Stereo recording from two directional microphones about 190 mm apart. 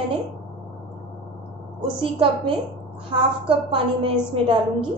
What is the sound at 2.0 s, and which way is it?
A woman's voice, 25° right (ahead or behind).